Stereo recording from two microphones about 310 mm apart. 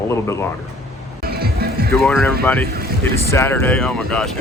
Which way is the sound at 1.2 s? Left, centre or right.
Right.